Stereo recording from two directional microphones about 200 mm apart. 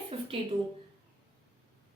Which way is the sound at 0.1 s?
30° right (ahead or behind).